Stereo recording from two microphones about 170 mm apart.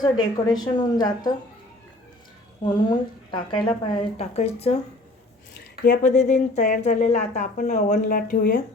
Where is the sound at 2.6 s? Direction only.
30° left (ahead or behind).